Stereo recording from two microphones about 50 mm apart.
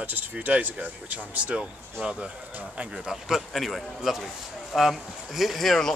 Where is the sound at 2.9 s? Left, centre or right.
Centre.